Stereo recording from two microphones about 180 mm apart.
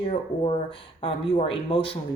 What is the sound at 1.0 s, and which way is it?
Speech, 30° left (ahead or behind).